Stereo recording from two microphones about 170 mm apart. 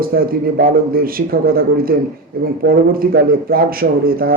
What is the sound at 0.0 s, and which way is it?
A man's voice, 60° right (ahead or behind).